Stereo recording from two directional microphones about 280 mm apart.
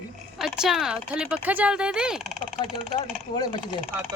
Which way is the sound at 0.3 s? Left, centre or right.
Centre.